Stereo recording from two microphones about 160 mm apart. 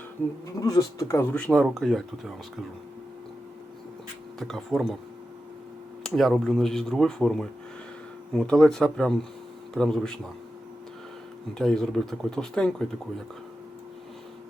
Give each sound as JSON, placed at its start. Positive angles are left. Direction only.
{"t": 0.4, "sound": "speech", "side_deg": 20}
{"t": 1.5, "sound": "speech", "side_deg": 0}
{"t": 4.4, "sound": "speech", "side_deg": 0}
{"t": 6.0, "sound": "speech", "side_deg": 0}
{"t": 11.5, "sound": "speech", "side_deg": 5}